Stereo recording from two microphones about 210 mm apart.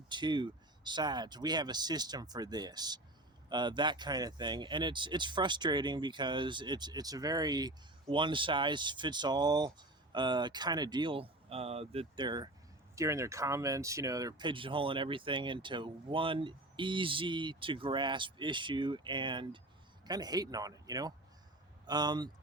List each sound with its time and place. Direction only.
0.1 s speech: 20° right (ahead or behind)